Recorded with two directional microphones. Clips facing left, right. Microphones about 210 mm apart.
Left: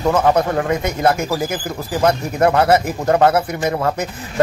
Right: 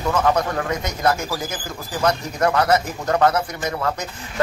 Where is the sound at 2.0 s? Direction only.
30° left (ahead or behind).